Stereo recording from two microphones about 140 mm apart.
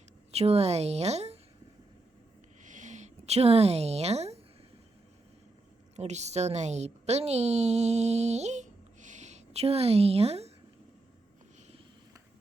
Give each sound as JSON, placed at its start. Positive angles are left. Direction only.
{"t": 0.3, "sound": "a woman's voice", "side_deg": -45}
{"t": 2.6, "sound": "a sound", "side_deg": -60}
{"t": 6.0, "sound": "a woman's voice", "side_deg": -55}